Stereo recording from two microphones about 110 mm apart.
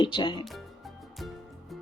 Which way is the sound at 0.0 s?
45° left (ahead or behind).